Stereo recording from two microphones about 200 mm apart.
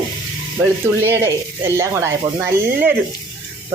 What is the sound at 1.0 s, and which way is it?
Speech, 10° right (ahead or behind).